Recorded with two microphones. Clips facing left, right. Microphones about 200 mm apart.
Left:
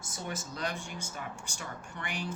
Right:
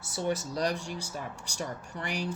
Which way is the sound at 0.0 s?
35° right (ahead or behind).